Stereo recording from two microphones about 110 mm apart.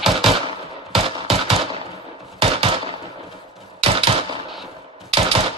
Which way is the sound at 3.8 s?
55° right (ahead or behind).